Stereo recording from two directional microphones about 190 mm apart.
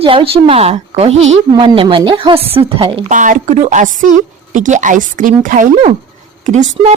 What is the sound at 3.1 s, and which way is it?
Speech, 40° right (ahead or behind).